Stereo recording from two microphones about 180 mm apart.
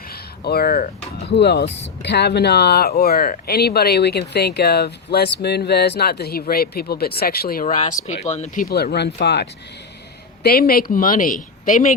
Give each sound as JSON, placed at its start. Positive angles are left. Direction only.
{"t": 0.1, "sound": "speech", "side_deg": 60}
{"t": 8.7, "sound": "speech", "side_deg": 65}